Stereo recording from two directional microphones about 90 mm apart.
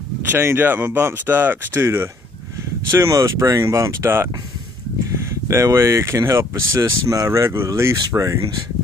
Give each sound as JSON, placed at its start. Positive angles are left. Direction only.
{"t": 0.2, "sound": "speech", "side_deg": -25}
{"t": 5.5, "sound": "speech", "side_deg": -30}